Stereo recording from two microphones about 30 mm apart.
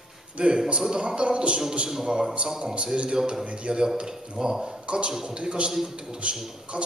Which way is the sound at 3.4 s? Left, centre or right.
Right.